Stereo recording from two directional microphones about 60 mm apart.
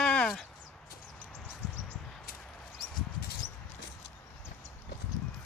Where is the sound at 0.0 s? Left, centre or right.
Centre.